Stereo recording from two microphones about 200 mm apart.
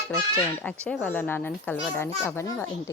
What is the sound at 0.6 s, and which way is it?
A child's voice, 5° left (ahead or behind).